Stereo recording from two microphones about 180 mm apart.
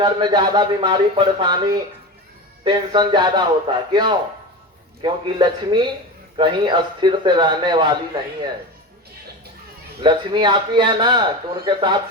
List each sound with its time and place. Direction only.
0.0 s a man's voice: 25° right (ahead or behind)
10.0 s a man's voice: 25° right (ahead or behind)